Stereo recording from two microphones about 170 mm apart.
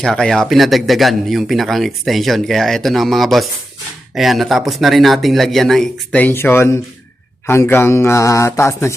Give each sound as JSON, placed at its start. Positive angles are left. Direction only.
{"t": 0.0, "sound": "speech", "side_deg": 0}